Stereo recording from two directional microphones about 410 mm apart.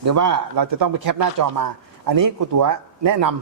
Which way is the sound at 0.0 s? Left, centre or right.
Right.